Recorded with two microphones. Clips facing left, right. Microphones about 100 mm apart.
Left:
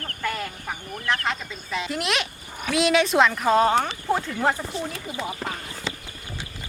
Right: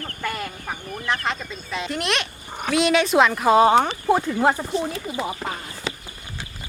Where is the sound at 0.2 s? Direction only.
5° right (ahead or behind).